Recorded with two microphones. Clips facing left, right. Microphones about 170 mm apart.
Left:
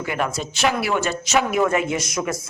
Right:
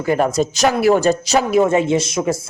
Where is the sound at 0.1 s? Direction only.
40° right (ahead or behind).